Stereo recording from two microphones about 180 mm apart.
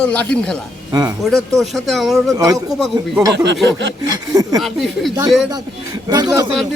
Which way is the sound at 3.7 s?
85° right.